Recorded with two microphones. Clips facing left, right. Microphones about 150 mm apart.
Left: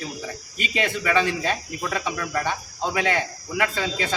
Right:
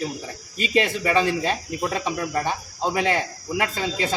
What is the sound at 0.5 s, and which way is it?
Speech, 35° right (ahead or behind).